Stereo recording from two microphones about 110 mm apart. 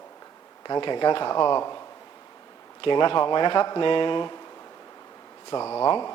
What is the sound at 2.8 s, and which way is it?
Speech, 50° left (ahead or behind).